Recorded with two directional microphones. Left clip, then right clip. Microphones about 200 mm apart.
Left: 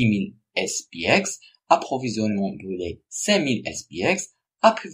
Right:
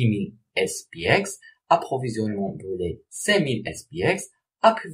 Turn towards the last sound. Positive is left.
turn(degrees=35)  # may be behind; listen again after turning